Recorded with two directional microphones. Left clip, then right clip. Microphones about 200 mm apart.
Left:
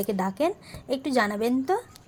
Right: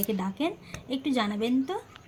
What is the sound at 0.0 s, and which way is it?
A woman's voice, 50° left (ahead or behind).